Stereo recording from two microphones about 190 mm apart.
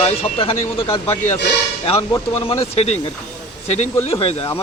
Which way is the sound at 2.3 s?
30° left (ahead or behind).